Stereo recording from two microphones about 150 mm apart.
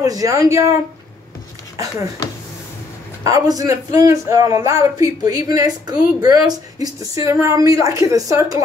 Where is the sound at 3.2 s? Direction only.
25° right (ahead or behind).